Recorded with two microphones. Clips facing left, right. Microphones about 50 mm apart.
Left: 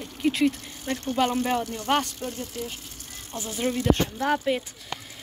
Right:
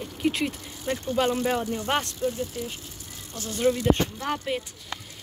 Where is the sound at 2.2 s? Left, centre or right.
Left.